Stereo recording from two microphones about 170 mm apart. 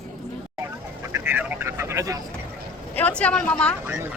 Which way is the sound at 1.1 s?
15° right (ahead or behind).